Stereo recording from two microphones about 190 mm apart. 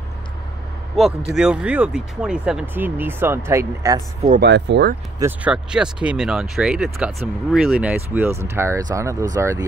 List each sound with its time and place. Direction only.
0.9 s speech: centre (ahead or behind)
4.4 s speech: 65° right (ahead or behind)
5.2 s speech: 5° right (ahead or behind)